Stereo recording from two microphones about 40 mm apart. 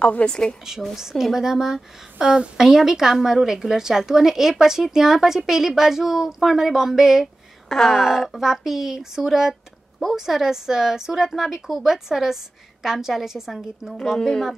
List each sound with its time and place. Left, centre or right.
0.3 s a woman's voice: left
0.9 s speech: centre
2.1 s speech: right
7.7 s speech: centre
8.0 s speech: centre
14.0 s speech: centre